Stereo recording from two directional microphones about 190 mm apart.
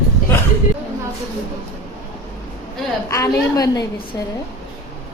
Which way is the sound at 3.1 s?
15° left (ahead or behind).